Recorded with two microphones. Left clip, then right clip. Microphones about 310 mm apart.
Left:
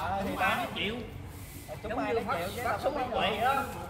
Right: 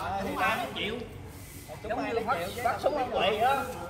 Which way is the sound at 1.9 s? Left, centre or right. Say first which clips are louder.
Right 1 dB; centre.